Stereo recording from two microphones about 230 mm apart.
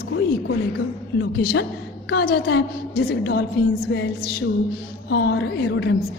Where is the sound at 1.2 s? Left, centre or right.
Left.